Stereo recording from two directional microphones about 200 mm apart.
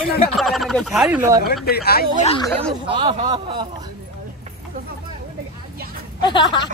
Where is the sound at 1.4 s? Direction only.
50° left (ahead or behind).